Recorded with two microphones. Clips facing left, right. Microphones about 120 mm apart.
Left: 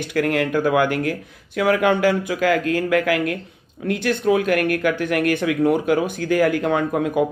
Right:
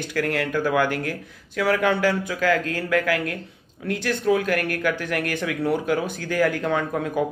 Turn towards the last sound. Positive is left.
turn(degrees=15)  # may be behind; listen again after turning